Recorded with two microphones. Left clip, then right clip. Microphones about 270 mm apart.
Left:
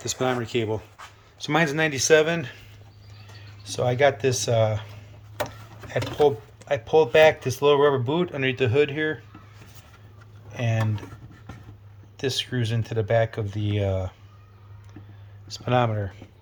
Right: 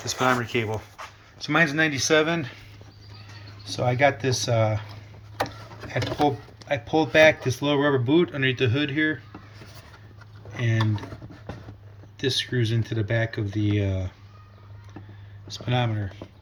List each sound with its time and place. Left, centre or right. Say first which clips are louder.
0.2 s speech: right 3 dB; centre
3.7 s speech: left 1 dB; centre
5.9 s speech: left 3 dB; centre
10.5 s speech: right 1 dB; centre
12.2 s speech: right 2 dB; centre
15.4 s speech: left 5 dB; centre